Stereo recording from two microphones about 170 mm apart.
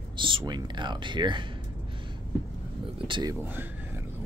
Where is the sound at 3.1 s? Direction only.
25° right (ahead or behind).